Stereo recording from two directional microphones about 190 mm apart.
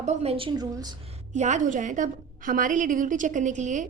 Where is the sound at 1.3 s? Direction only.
40° right (ahead or behind).